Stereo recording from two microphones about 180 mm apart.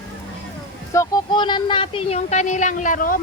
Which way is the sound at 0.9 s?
20° left (ahead or behind).